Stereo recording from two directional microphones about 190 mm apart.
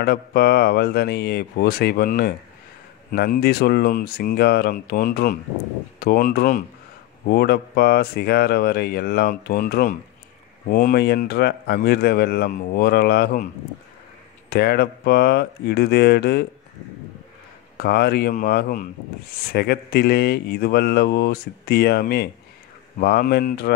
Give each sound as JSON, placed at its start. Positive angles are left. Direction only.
{"t": 0.0, "sound": "speech", "side_deg": 55}
{"t": 14.5, "sound": "speech", "side_deg": 55}
{"t": 17.7, "sound": "speech", "side_deg": 55}